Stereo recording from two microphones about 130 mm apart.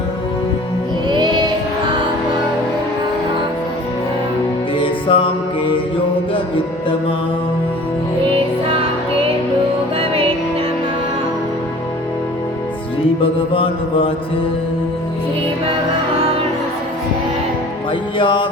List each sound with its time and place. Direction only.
1.0 s music: 35° right (ahead or behind)
5.1 s mantra: 45° left (ahead or behind)
10.0 s music: 45° right (ahead or behind)
13.5 s mantra: 45° left (ahead or behind)
18.2 s music: 40° left (ahead or behind)